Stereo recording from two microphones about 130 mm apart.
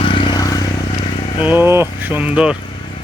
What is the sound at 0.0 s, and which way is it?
Vehicle, 40° left (ahead or behind).